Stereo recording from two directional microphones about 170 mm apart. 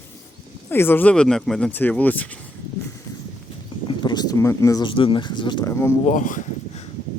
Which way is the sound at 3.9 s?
25° left (ahead or behind).